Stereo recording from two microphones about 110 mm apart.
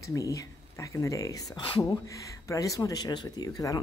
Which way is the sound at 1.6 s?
55° left (ahead or behind).